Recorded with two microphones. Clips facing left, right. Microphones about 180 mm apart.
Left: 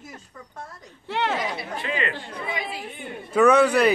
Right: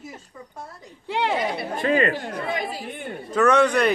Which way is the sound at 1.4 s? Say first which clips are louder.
Right 6 dB; 50° right (ahead or behind).